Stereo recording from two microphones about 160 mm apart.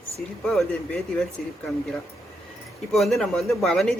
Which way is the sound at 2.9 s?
Centre (ahead or behind).